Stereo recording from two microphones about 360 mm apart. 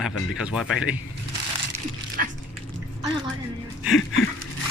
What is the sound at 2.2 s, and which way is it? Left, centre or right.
Dog, right.